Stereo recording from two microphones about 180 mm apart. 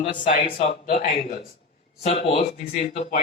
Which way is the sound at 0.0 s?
25° left (ahead or behind).